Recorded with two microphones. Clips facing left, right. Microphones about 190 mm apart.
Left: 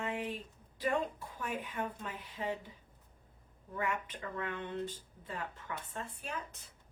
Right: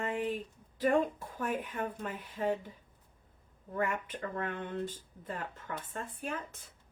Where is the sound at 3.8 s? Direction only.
50° right (ahead or behind).